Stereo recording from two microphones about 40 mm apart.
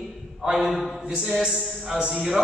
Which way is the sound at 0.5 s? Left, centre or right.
Centre.